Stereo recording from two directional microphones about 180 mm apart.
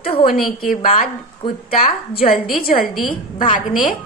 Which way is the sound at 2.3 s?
50° left (ahead or behind).